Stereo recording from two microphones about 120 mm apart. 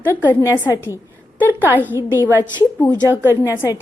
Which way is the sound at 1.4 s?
15° right (ahead or behind).